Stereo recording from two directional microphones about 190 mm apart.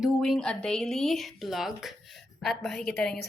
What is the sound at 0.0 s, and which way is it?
A woman's voice, centre (ahead or behind).